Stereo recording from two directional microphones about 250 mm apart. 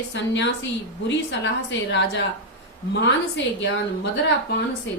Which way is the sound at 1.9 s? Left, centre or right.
Left.